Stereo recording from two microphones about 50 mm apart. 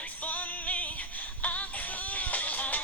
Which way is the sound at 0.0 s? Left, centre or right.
Left.